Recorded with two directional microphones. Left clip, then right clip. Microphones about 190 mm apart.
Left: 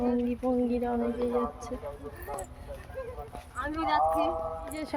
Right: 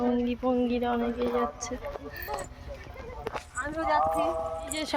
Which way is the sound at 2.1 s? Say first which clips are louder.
Right 4 dB; 40° left (ahead or behind).